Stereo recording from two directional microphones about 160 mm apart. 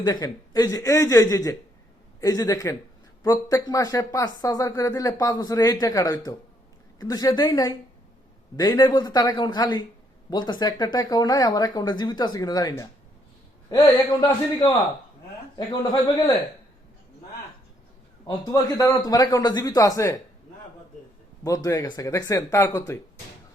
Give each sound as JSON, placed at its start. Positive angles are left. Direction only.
{"t": 0.0, "sound": "speech", "side_deg": 25}
{"t": 14.3, "sound": "a man's voice", "side_deg": 10}
{"t": 15.5, "sound": "speech", "side_deg": 30}
{"t": 18.4, "sound": "speech", "side_deg": 20}
{"t": 21.4, "sound": "speech", "side_deg": 20}